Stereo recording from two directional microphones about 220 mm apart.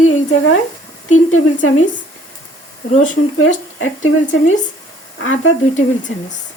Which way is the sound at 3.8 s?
65° left (ahead or behind).